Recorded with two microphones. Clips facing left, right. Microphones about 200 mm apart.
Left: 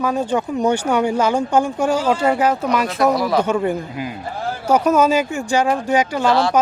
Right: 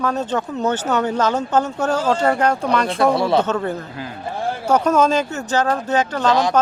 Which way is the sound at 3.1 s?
30° right (ahead or behind).